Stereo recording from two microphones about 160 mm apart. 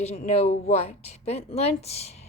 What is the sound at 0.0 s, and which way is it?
A woman's voice, 40° left (ahead or behind).